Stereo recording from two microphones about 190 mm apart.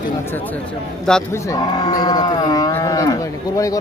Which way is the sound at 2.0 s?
20° left (ahead or behind).